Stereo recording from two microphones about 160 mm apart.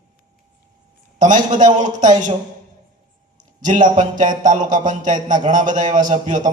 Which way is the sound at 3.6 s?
50° right (ahead or behind).